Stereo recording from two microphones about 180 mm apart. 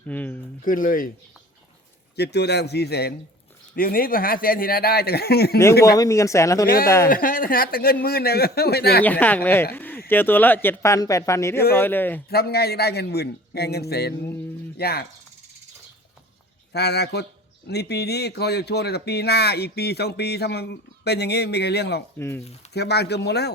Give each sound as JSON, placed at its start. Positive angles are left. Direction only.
{"t": 0.1, "sound": "a sound", "side_deg": 10}
{"t": 0.6, "sound": "a man's voice", "side_deg": 50}
{"t": 2.1, "sound": "a man's voice", "side_deg": 65}
{"t": 6.0, "sound": "speech", "side_deg": 15}
{"t": 7.1, "sound": "a man's voice", "side_deg": 50}
{"t": 9.0, "sound": "speech", "side_deg": 10}
{"t": 12.3, "sound": "speech", "side_deg": 60}
{"t": 16.7, "sound": "a man's voice", "side_deg": 65}
{"t": 22.2, "sound": "speech", "side_deg": 15}
{"t": 22.7, "sound": "speech", "side_deg": 65}